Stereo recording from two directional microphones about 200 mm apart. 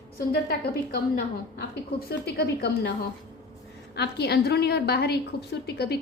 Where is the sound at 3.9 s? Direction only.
55° left (ahead or behind).